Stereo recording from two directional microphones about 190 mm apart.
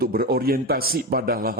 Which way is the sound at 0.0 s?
50° right (ahead or behind).